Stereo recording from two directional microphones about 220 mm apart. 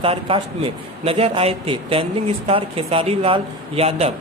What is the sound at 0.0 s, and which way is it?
A man's voice, 25° right (ahead or behind).